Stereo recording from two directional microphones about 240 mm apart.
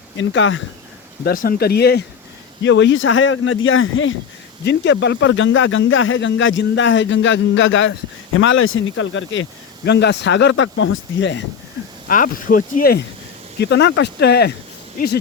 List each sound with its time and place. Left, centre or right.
0.2 s speech: left
1.2 s speech: left
12.0 s speech: left